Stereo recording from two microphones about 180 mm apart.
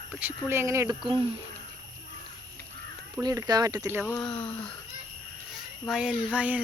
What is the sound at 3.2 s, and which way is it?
Speech, 20° right (ahead or behind).